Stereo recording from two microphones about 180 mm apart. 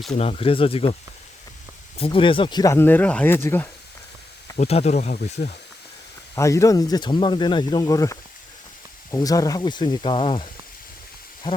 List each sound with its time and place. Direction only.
0.1 s speech: 35° left (ahead or behind)
2.0 s speech: 30° left (ahead or behind); by 3.7 s 15° left (ahead or behind)
4.5 s speech: 35° left (ahead or behind)
6.3 s speech: 15° left (ahead or behind)